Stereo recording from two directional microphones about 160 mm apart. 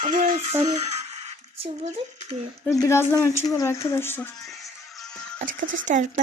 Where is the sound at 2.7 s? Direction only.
15° left (ahead or behind).